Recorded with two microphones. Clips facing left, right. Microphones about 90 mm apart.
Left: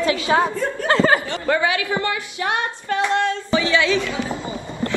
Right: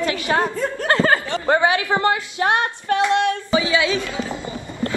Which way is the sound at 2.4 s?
40° right (ahead or behind).